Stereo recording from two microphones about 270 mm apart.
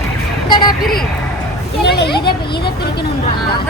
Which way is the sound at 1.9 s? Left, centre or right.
Left.